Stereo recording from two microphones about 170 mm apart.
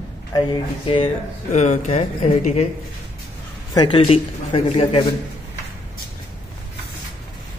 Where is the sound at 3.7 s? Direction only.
30° left (ahead or behind).